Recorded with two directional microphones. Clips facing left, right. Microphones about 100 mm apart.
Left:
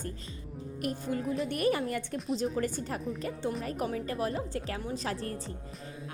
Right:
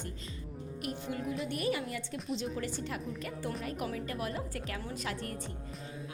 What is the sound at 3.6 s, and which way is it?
A woman's voice, 35° left (ahead or behind).